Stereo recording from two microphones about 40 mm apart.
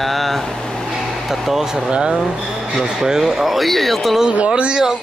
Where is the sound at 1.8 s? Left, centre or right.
Right.